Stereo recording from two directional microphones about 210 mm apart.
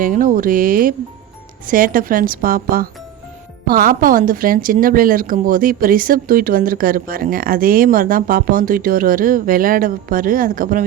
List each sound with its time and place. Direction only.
0.0 s speech: 40° right (ahead or behind)